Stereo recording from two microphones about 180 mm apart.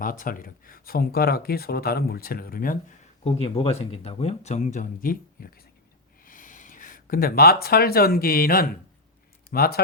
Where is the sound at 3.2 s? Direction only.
30° left (ahead or behind).